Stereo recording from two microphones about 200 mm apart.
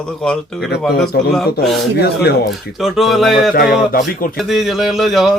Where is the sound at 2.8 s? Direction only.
Centre (ahead or behind).